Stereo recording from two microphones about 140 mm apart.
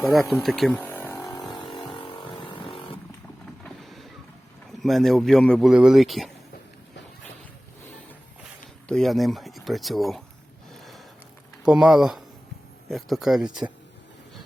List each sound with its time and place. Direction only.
0.0 s speech: centre (ahead or behind)
0.8 s a sound: 15° left (ahead or behind)
1.9 s vehicle: 40° left (ahead or behind)
3.6 s boat: centre (ahead or behind)
4.8 s speech: centre (ahead or behind)
8.9 s speech: centre (ahead or behind)
10.8 s a sound: centre (ahead or behind)
11.6 s speech: 5° right (ahead or behind)